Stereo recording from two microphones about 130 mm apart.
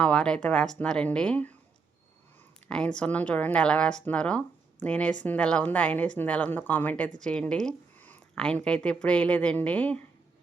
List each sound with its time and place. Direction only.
0.0 s a woman's voice: 5° left (ahead or behind)
2.6 s a woman's voice: 5° left (ahead or behind)